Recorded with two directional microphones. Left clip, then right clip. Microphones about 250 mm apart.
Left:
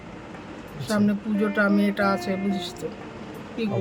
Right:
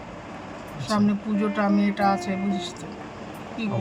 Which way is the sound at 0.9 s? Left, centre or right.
Centre.